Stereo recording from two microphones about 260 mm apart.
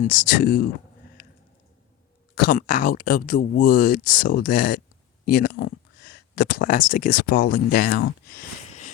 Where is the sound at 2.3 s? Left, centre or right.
Left.